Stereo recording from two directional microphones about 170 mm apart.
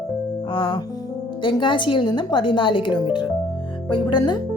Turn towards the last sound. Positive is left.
turn(degrees=25)  # may be behind; listen again after turning